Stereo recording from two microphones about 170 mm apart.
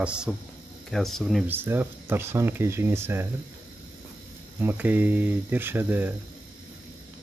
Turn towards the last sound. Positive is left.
turn(degrees=-10)  # may be behind; listen again after turning